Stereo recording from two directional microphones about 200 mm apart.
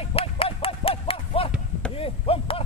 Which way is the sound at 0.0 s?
30° left (ahead or behind).